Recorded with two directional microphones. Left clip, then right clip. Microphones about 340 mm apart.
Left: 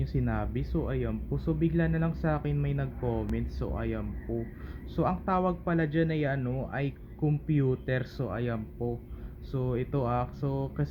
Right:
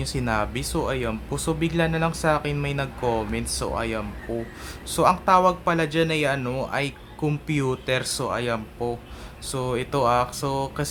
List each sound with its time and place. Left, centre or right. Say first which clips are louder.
0.0 s speech: right 9 dB; centre